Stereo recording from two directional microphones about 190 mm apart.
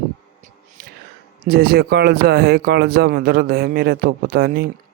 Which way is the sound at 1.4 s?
55° right (ahead or behind).